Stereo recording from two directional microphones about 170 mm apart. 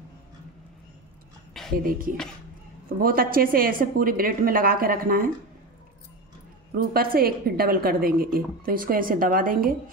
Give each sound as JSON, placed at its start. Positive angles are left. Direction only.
{"t": 1.6, "sound": "a sound", "side_deg": 0}
{"t": 3.0, "sound": "a woman's voice", "side_deg": -60}
{"t": 6.8, "sound": "a woman's voice", "side_deg": -60}